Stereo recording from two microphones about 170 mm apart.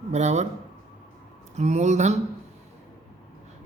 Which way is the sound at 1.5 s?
40° right (ahead or behind).